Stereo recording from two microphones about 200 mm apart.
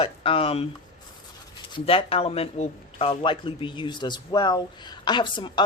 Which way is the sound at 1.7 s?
30° left (ahead or behind).